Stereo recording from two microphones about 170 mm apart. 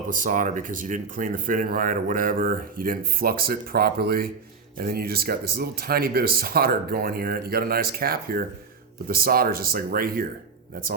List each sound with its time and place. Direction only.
0.1 s speech: 50° right (ahead or behind)